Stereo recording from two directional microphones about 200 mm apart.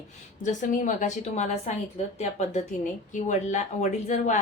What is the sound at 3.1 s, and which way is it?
A woman's voice, 35° left (ahead or behind).